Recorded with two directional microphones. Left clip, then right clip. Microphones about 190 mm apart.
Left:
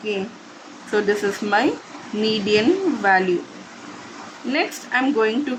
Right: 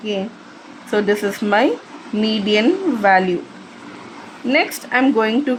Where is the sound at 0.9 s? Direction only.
35° right (ahead or behind).